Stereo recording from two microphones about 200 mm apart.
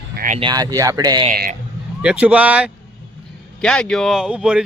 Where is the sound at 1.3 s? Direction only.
45° right (ahead or behind).